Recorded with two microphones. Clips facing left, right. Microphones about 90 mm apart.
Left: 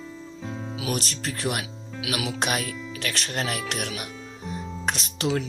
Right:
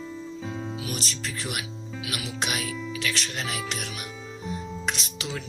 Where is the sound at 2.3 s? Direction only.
45° left (ahead or behind).